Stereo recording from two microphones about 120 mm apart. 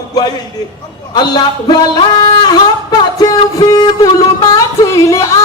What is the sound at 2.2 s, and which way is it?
Music, 35° left (ahead or behind).